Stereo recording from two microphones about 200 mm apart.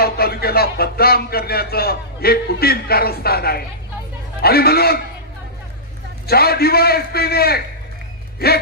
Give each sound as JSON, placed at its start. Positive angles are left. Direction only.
{"t": 0.0, "sound": "a man's voice", "side_deg": 50}
{"t": 6.2, "sound": "a man's voice", "side_deg": 50}